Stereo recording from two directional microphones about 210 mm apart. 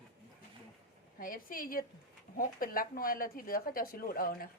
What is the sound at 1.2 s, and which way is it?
A woman's voice, 40° left (ahead or behind).